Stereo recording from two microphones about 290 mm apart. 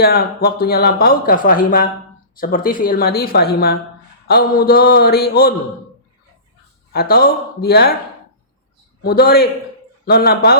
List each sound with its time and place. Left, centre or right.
0.0 s speech: left
6.9 s speech: left
9.0 s speech: left